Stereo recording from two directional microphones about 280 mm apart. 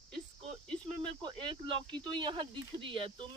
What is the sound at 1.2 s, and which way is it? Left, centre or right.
Speech, centre.